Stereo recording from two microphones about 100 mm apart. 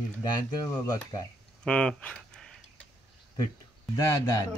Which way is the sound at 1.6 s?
10° left (ahead or behind).